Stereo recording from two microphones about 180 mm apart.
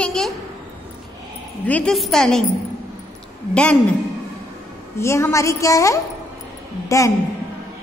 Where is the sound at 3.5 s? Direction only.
5° left (ahead or behind).